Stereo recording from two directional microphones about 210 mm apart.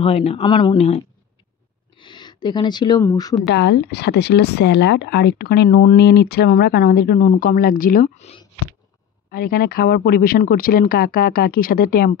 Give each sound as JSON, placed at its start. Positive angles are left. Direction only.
{"t": 0.0, "sound": "speech", "side_deg": 30}
{"t": 3.4, "sound": "speech", "side_deg": 55}
{"t": 9.3, "sound": "speech", "side_deg": 45}